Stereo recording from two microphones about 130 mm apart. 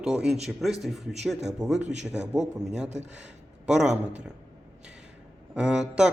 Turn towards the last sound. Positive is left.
turn(degrees=-5)  # may be behind; listen again after turning